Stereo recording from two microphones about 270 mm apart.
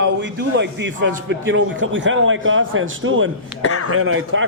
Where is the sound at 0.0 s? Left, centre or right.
Right.